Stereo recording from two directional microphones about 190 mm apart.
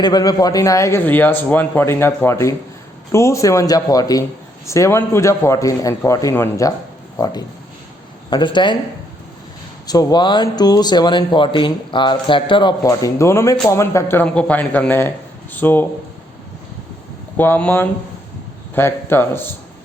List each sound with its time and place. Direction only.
0.0 s a man's voice: 20° left (ahead or behind)
9.8 s a man's voice: 20° left (ahead or behind)
17.3 s a man's voice: 10° left (ahead or behind)